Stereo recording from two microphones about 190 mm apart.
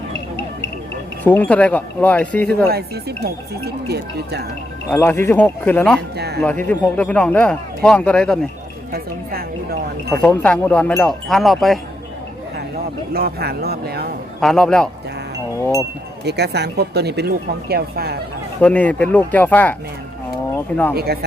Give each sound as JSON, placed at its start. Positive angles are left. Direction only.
{"t": 1.2, "sound": "a man's voice", "side_deg": 10}
{"t": 2.6, "sound": "speech", "side_deg": -55}
{"t": 4.9, "sound": "a man's voice", "side_deg": 10}
{"t": 6.1, "sound": "speech", "side_deg": -60}
{"t": 6.4, "sound": "a man's voice", "side_deg": 10}
{"t": 8.9, "sound": "a woman's voice", "side_deg": -55}
{"t": 10.1, "sound": "speech", "side_deg": 10}
{"t": 13.1, "sound": "speech", "side_deg": -55}
{"t": 14.4, "sound": "speech", "side_deg": 5}
{"t": 16.2, "sound": "speech", "side_deg": -60}
{"t": 18.6, "sound": "a man's voice", "side_deg": 5}
{"t": 20.9, "sound": "speech", "side_deg": -55}